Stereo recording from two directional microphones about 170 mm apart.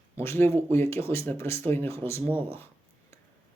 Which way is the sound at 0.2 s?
15° left (ahead or behind).